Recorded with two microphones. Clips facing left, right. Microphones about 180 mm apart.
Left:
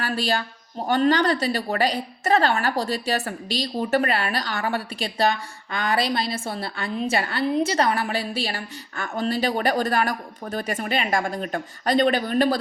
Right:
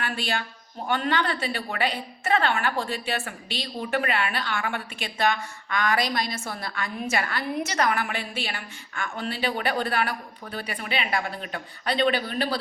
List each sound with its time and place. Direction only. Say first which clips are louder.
0.0 s speech: left 5 dB; 40° left (ahead or behind)